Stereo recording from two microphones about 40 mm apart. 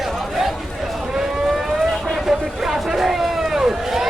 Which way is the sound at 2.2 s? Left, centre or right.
Centre.